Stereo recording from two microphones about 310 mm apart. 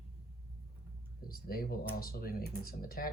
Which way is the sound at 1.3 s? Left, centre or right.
Left.